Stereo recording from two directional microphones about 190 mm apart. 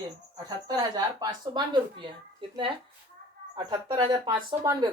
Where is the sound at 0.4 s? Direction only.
20° right (ahead or behind).